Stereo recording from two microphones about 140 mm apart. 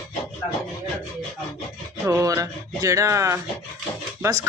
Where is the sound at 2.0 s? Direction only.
20° right (ahead or behind).